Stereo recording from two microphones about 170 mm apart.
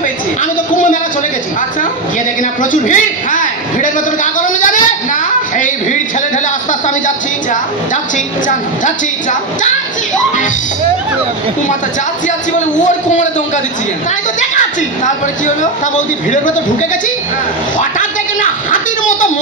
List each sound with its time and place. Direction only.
0.4 s a man's voice: 50° left (ahead or behind)
2.6 s a man's voice: 50° left (ahead or behind)
8.8 s a man's voice: 50° left (ahead or behind)
12.3 s a man's voice: 45° left (ahead or behind)
14.5 s a man's voice: 45° left (ahead or behind)
17.7 s a sound: 50° left (ahead or behind)